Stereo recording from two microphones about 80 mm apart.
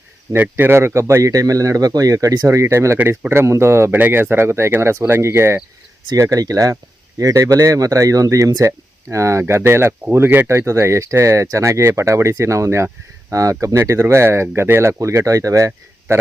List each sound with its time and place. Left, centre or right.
0.5 s speech: right